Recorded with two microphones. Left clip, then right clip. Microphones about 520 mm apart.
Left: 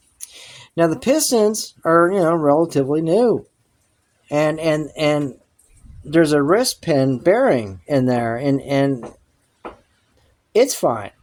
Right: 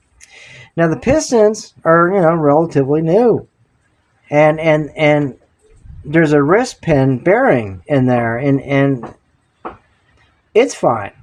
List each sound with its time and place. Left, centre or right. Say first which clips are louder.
0.3 s speech: right 5 dB; left
10.6 s speech: right 3 dB; left